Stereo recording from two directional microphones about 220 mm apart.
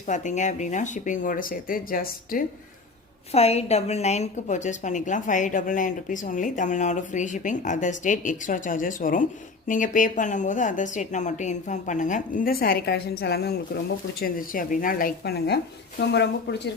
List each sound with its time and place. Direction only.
0.0 s a woman's voice: 35° left (ahead or behind)
3.3 s a woman's voice: 30° left (ahead or behind); by 16.6 s 50° left (ahead or behind)